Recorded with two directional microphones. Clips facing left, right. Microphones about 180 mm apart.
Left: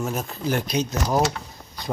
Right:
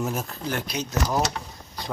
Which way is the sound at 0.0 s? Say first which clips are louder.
Left 1 dB; 5° right (ahead or behind).